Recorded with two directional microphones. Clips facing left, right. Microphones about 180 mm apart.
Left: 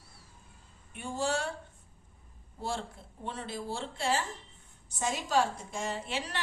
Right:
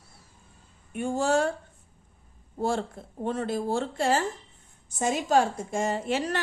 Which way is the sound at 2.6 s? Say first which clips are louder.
Right 9 dB; 50° right (ahead or behind).